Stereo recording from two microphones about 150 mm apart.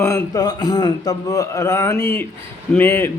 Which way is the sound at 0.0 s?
20° left (ahead or behind).